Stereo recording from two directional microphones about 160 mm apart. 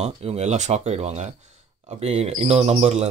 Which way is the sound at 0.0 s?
45° right (ahead or behind).